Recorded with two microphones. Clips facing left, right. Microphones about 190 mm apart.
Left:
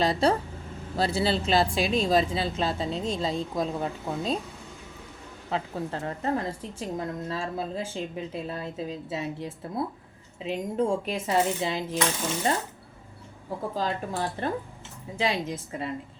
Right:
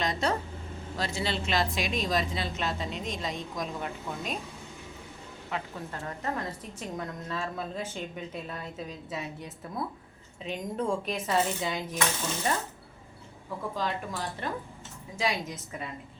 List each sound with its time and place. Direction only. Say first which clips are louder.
0.0 s a woman's voice: left 6 dB; 30° left (ahead or behind)
5.5 s a woman's voice: left 6 dB; 30° left (ahead or behind)
13.7 s a woman's voice: left 4 dB; 30° left (ahead or behind)